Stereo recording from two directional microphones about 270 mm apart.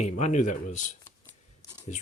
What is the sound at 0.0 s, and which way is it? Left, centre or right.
Speech, left.